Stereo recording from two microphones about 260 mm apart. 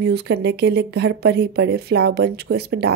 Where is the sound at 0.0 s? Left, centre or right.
Right.